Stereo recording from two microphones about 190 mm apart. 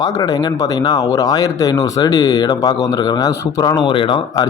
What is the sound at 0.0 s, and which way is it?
Speech, 20° left (ahead or behind).